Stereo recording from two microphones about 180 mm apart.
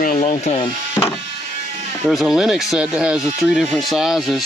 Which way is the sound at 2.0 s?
Centre (ahead or behind).